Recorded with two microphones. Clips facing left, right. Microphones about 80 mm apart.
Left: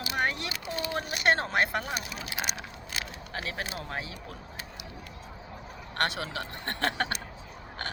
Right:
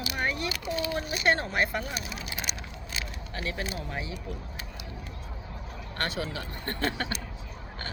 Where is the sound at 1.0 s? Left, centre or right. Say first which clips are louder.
Left 2 dB; left.